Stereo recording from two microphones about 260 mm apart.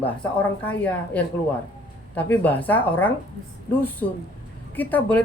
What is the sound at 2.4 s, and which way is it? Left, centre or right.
Speech, centre.